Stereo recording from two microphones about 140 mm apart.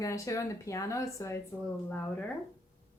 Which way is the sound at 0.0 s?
20° left (ahead or behind).